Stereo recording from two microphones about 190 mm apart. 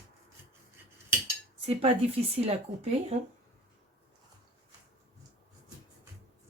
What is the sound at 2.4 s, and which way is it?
Speech, 35° right (ahead or behind).